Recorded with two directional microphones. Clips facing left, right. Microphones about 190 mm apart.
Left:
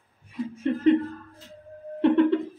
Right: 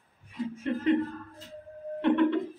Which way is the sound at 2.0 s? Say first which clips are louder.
Left 4 dB; 35° left (ahead or behind).